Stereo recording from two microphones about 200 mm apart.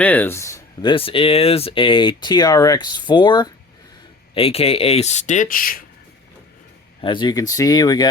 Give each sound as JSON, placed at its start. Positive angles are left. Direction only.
{"t": 0.0, "sound": "speech", "side_deg": 10}
{"t": 7.0, "sound": "speech", "side_deg": 25}